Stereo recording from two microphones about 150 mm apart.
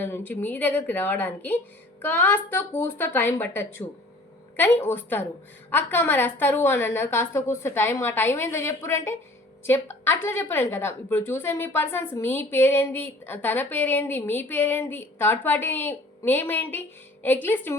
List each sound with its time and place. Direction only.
0.0 s a woman's voice: 15° left (ahead or behind)